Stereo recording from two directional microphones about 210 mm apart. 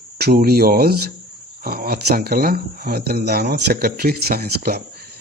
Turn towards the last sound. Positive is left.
turn(degrees=-50)  # may be behind; listen again after turning